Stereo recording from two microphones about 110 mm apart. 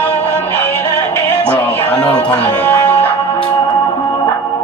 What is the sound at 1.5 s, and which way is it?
Speech, 15° left (ahead or behind).